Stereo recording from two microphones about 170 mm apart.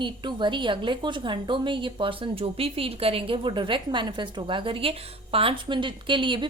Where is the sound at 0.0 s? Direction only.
25° right (ahead or behind).